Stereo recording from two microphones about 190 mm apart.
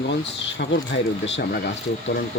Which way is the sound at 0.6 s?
70° left (ahead or behind).